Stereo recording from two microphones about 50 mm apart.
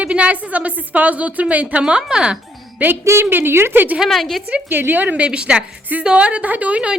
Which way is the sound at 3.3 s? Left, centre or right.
Right.